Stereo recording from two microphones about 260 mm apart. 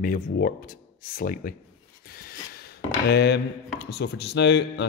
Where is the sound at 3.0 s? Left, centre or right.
Left.